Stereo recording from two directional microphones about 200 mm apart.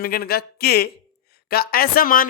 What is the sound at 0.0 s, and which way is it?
Speech, 50° left (ahead or behind).